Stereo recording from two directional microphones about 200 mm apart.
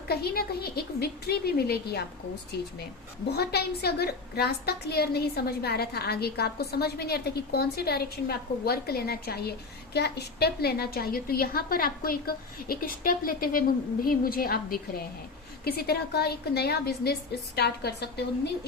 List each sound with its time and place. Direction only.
0.1 s a woman's voice: 50° left (ahead or behind)
3.3 s a woman's voice: 55° left (ahead or behind)